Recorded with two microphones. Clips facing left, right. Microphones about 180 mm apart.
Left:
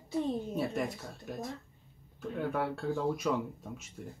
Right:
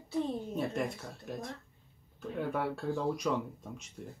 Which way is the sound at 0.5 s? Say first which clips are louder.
Even; centre (ahead or behind).